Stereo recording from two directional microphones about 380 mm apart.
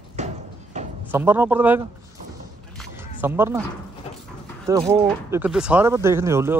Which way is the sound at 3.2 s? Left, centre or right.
Centre.